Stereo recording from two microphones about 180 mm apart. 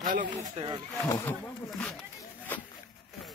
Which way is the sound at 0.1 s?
45° right (ahead or behind).